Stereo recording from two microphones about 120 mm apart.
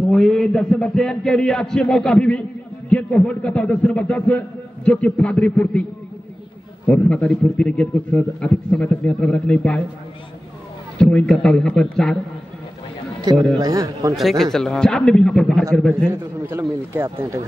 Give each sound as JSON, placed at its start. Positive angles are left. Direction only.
{"t": 0.1, "sound": "a man's voice", "side_deg": 0}
{"t": 6.9, "sound": "a man's voice", "side_deg": 10}
{"t": 11.0, "sound": "a man's voice", "side_deg": 5}
{"t": 13.2, "sound": "a man's voice", "side_deg": -35}
{"t": 14.1, "sound": "a man's voice", "side_deg": 0}
{"t": 16.1, "sound": "speech", "side_deg": -25}